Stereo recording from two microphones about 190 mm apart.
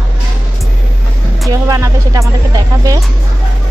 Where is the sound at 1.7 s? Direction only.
15° right (ahead or behind).